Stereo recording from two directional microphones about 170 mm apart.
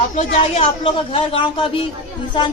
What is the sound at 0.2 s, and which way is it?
Speech, 40° left (ahead or behind).